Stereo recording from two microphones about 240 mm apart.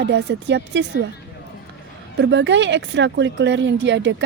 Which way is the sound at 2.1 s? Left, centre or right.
Right.